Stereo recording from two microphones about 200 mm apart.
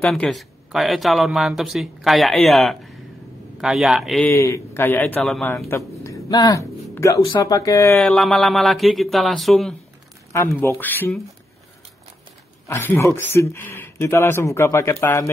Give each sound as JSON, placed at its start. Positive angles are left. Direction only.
{"t": 0.0, "sound": "speech", "side_deg": 0}
{"t": 4.3, "sound": "speech", "side_deg": 15}
{"t": 8.0, "sound": "speech", "side_deg": 0}
{"t": 10.3, "sound": "speech", "side_deg": 15}
{"t": 12.6, "sound": "speech", "side_deg": 10}